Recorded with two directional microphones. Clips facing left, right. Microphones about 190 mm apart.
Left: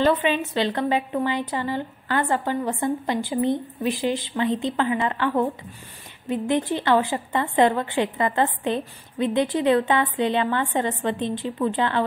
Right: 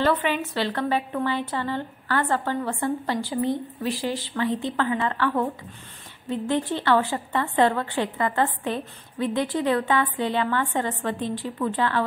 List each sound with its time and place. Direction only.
0.0 s a woman's voice: 20° left (ahead or behind)